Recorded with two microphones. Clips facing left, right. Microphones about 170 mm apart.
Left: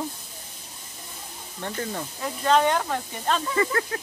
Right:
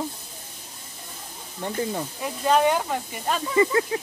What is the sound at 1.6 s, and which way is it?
Speech, 10° right (ahead or behind).